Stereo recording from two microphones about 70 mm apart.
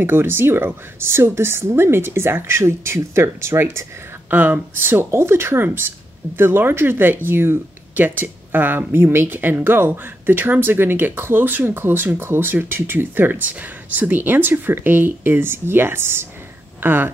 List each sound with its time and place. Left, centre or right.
0.0 s speech: right
4.3 s speech: right